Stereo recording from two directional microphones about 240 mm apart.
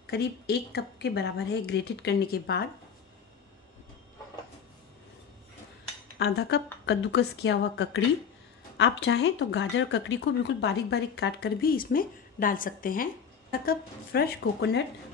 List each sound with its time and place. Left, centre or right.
0.0 s a woman's voice: left
6.1 s speech: left